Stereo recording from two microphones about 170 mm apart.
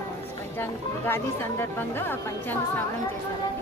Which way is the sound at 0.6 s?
10° left (ahead or behind).